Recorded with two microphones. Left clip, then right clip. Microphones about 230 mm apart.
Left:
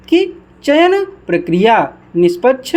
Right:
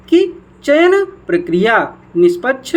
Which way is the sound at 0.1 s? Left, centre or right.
Left.